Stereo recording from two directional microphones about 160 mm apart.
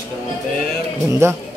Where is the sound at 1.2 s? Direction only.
15° right (ahead or behind).